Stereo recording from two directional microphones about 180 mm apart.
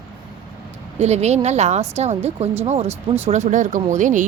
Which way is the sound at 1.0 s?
40° right (ahead or behind).